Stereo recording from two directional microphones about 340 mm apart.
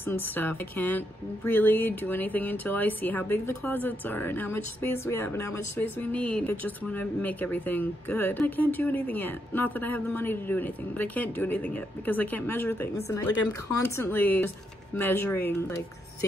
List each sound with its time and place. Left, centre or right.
0.0 s speech: centre